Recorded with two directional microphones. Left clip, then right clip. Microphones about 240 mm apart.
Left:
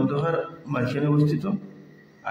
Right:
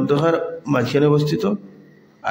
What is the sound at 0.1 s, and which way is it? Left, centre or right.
A man's voice, right.